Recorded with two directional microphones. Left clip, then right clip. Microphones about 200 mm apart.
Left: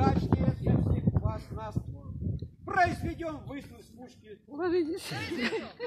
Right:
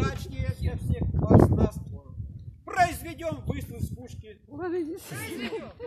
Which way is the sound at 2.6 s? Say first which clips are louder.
Right 2 dB; 40° right (ahead or behind).